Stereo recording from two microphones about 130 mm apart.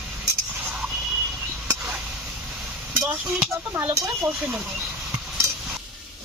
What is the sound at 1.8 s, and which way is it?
Chop, 5° right (ahead or behind).